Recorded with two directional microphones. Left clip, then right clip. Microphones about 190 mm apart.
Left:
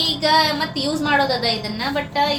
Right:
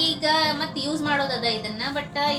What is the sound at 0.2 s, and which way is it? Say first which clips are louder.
A woman's voice: left 5 dB; 15° left (ahead or behind).